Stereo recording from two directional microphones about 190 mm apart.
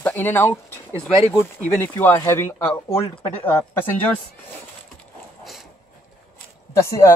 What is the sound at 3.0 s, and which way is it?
Speech, 30° left (ahead or behind).